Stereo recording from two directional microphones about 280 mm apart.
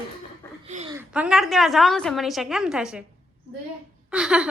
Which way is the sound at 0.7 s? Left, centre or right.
Right.